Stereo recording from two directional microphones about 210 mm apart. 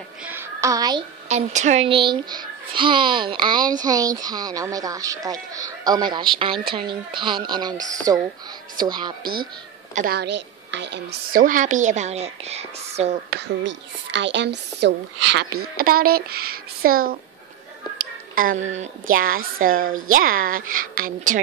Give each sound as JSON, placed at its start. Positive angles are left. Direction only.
{"t": 0.2, "sound": "a sound", "side_deg": -10}
{"t": 1.3, "sound": "a child's voice", "side_deg": -35}
{"t": 9.2, "sound": "a woman's voice", "side_deg": -45}
{"t": 14.1, "sound": "speech", "side_deg": -55}
{"t": 15.8, "sound": "speech", "side_deg": -45}
{"t": 18.3, "sound": "a woman's voice", "side_deg": -40}